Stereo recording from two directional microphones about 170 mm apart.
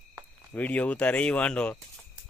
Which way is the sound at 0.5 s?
10° left (ahead or behind).